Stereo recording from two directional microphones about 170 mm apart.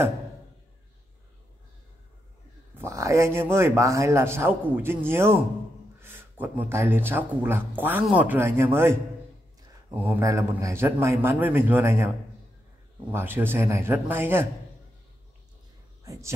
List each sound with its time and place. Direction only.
2.8 s speech: 15° right (ahead or behind)
13.1 s speech: 10° right (ahead or behind)
16.0 s speech: 20° right (ahead or behind)